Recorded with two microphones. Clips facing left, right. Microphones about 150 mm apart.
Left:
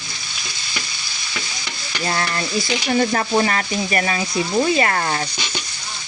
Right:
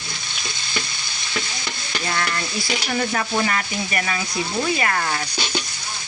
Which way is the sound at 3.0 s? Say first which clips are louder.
Left 4 dB; 35° left (ahead or behind).